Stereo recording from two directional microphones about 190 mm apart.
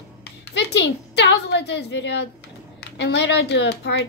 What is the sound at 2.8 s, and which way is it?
A child's voice, 65° left (ahead or behind).